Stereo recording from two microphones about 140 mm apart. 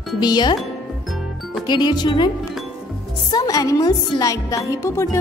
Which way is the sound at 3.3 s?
25° left (ahead or behind).